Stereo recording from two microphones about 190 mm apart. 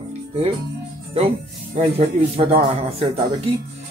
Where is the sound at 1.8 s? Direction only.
35° right (ahead or behind).